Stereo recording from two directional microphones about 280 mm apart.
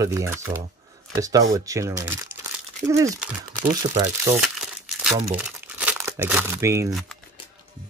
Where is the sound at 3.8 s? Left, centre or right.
Right.